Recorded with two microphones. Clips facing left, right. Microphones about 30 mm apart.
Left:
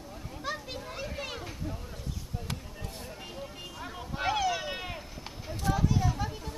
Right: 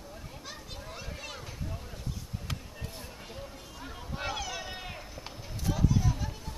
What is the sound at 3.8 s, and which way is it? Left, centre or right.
Vehicle, centre.